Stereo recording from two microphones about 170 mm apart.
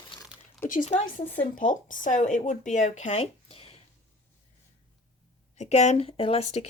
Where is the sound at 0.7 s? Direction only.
45° left (ahead or behind).